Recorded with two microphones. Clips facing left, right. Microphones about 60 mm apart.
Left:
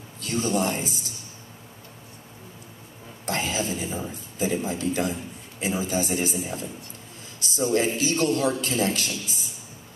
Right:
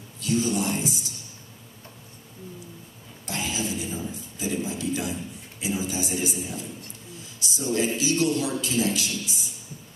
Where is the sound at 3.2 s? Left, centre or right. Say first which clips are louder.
Left 3 dB; left.